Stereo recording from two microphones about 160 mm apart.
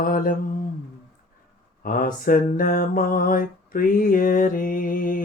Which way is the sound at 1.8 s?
60° left (ahead or behind).